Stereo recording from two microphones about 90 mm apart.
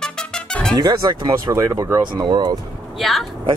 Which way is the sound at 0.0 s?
10° left (ahead or behind).